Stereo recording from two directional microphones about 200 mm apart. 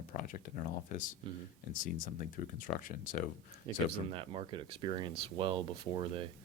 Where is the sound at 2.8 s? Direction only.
45° left (ahead or behind).